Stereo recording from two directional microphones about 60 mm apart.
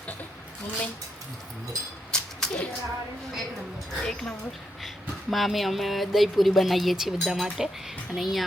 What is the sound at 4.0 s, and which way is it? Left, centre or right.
Speech, centre.